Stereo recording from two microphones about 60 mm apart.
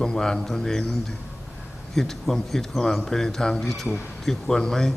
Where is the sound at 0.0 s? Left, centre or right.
Centre.